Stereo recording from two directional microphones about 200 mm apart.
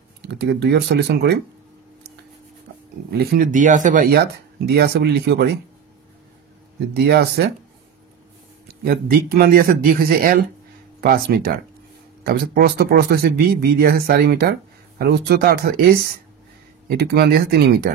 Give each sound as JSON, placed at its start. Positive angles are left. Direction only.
{"t": 0.2, "sound": "speech", "side_deg": -55}
{"t": 3.1, "sound": "speech", "side_deg": -50}
{"t": 6.9, "sound": "speech", "side_deg": -55}
{"t": 8.6, "sound": "speech", "side_deg": -50}
{"t": 16.9, "sound": "speech", "side_deg": -55}